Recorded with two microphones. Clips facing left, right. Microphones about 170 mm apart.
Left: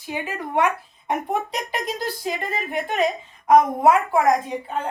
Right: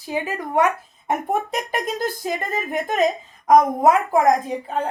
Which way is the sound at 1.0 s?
50° right (ahead or behind).